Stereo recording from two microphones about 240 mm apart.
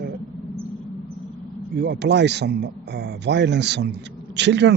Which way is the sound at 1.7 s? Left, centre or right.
Right.